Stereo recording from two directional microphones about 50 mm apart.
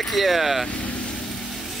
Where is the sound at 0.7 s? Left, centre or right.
Left.